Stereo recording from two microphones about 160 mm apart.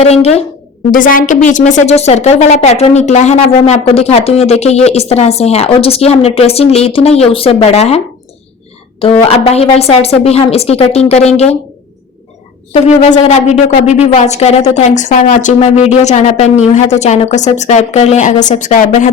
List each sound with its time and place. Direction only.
0.0 s speech: 40° left (ahead or behind)
0.9 s a woman's voice: 60° left (ahead or behind); by 8.0 s 40° left (ahead or behind)
9.2 s speech: 35° left (ahead or behind)
12.7 s a woman's voice: 45° left (ahead or behind)